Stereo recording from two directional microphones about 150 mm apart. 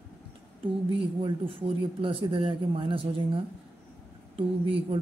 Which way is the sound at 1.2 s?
35° right (ahead or behind).